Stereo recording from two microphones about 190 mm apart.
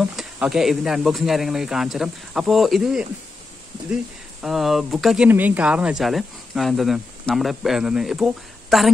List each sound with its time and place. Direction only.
0.0 s speech: centre (ahead or behind)